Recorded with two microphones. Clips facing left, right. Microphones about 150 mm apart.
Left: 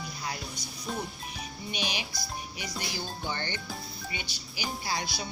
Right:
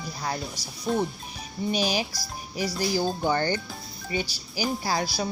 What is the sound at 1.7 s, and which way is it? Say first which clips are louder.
Music: right 9 dB; 40° right (ahead or behind).